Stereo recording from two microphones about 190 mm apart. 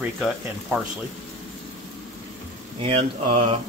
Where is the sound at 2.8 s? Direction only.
30° right (ahead or behind).